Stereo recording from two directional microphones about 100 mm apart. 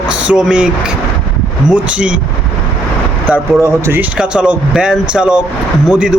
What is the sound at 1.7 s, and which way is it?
Speech, 10° right (ahead or behind).